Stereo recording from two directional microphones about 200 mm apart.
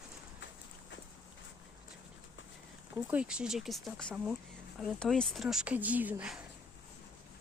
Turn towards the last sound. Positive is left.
turn(degrees=-5)  # may be behind; listen again after turning